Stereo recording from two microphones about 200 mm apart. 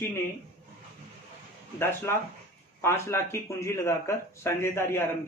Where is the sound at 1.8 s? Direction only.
10° left (ahead or behind).